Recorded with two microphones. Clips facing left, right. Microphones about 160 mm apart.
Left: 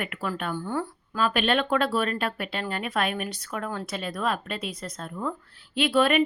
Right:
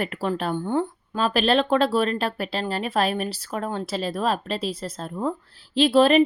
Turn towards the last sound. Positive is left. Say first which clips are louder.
# right 5 dB
turn(degrees=-30)  # may be behind; listen again after turning